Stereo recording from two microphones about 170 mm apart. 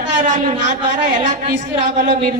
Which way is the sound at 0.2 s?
50° right (ahead or behind).